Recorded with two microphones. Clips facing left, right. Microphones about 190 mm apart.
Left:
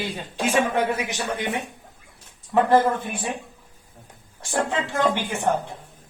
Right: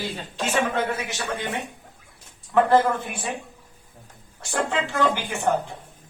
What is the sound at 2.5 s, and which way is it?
Speech, 15° left (ahead or behind).